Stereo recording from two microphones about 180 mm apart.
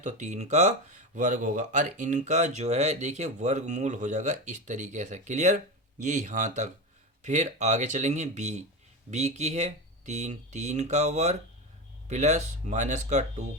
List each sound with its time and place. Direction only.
0.0 s speech: 40° right (ahead or behind)